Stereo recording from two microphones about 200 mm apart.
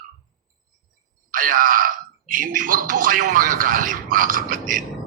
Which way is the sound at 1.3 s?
45° right (ahead or behind).